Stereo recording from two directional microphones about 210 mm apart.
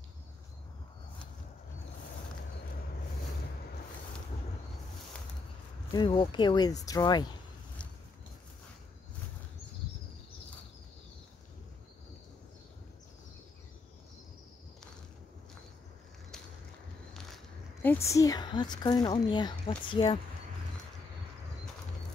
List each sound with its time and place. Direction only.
5.9 s a woman's voice: 25° left (ahead or behind)
17.8 s a woman's voice: 15° left (ahead or behind)